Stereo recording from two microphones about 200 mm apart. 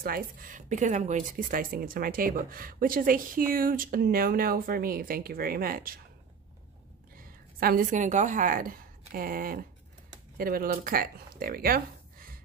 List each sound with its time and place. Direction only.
0.0 s speech: 45° right (ahead or behind)
7.2 s a woman's voice: 45° right (ahead or behind)